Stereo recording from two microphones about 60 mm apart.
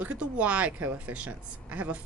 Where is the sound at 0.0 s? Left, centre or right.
Right.